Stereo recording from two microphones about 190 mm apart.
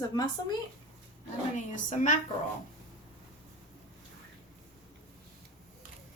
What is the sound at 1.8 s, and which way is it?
Speech, 40° left (ahead or behind).